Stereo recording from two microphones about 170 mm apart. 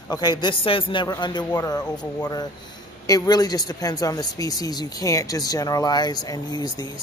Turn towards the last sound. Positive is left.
turn(degrees=25)  # may be behind; listen again after turning